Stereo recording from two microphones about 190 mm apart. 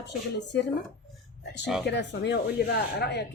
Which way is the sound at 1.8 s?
65° left (ahead or behind).